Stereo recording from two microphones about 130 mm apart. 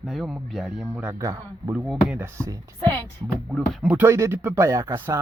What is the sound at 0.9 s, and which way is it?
Speech, 15° right (ahead or behind).